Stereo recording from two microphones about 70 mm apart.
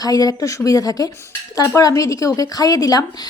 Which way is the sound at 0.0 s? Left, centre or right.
Left.